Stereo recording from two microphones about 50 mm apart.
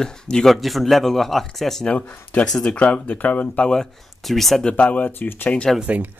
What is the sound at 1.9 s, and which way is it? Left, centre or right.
Speech, left.